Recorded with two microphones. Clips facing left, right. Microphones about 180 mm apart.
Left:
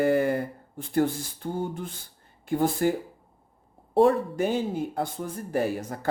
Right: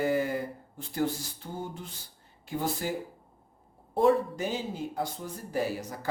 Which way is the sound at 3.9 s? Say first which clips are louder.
Left 4 dB; 55° left (ahead or behind).